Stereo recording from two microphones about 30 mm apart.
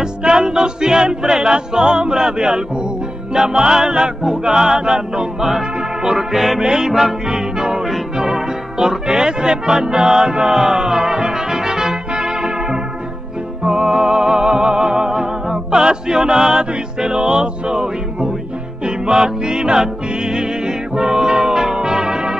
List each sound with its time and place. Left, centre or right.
0.0 s music: right
6.3 s music: centre
6.6 s music: right
6.9 s music: centre
10.8 s brass instrument: centre
13.7 s music: right